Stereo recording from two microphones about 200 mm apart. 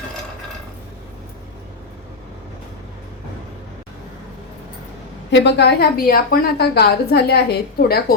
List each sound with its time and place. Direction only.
5.3 s a woman's voice: 60° left (ahead or behind)